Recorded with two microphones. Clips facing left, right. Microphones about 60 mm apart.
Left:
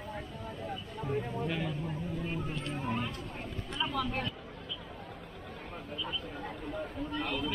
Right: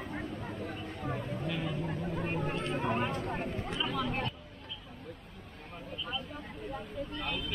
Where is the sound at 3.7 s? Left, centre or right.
Centre.